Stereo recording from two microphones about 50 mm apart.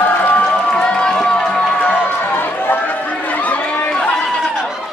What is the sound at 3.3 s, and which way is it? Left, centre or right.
Run, left.